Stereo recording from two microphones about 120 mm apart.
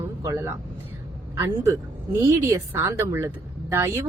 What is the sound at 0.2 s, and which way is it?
A woman's voice, 25° right (ahead or behind).